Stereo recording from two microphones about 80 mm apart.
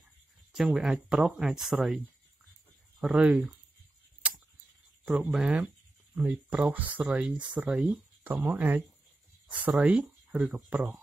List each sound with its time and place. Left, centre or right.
0.5 s speech: centre
3.0 s speech: centre
5.0 s speech: centre
7.7 s speech: centre
8.2 s speech: right